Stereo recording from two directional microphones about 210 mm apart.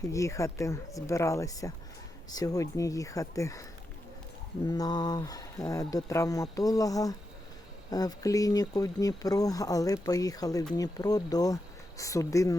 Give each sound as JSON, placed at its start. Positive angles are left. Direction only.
{"t": 0.1, "sound": "speech", "side_deg": 15}